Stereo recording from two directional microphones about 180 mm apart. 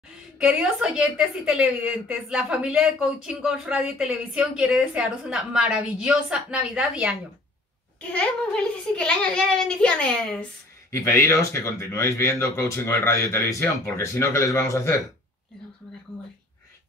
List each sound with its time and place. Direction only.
0.4 s a woman's voice: 5° right (ahead or behind)
8.0 s a woman's voice: 5° left (ahead or behind)
10.9 s speech: 15° left (ahead or behind)